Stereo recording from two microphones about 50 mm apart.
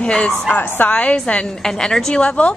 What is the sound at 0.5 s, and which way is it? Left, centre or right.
Speech, left.